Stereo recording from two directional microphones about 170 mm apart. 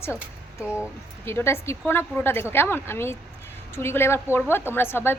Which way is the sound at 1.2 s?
15° left (ahead or behind).